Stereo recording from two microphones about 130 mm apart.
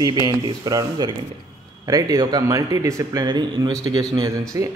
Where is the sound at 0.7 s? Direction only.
30° right (ahead or behind).